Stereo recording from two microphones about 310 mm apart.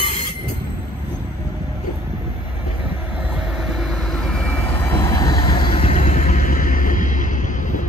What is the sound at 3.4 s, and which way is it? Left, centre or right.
Vehicle, centre.